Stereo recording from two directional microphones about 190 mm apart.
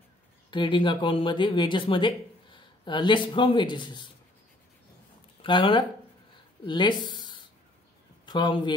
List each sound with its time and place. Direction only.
0.5 s speech: 25° left (ahead or behind)
5.4 s speech: 25° left (ahead or behind)